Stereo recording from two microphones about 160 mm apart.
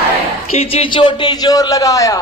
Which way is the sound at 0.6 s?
35° left (ahead or behind).